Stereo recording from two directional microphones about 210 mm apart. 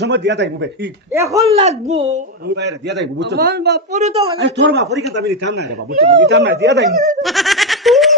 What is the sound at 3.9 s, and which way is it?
Speech, 30° right (ahead or behind).